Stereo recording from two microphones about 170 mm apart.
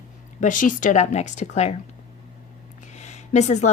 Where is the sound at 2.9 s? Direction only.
40° left (ahead or behind).